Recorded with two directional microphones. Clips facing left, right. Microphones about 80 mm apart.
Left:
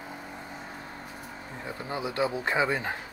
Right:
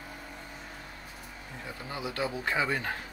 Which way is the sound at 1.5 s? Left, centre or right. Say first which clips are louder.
Left 5 dB; left.